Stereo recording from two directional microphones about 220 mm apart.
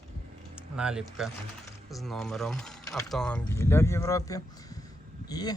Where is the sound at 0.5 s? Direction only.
5° right (ahead or behind); by 5.5 s 15° left (ahead or behind).